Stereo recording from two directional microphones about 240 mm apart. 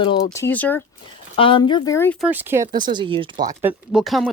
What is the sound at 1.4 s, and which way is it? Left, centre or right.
Speech, left.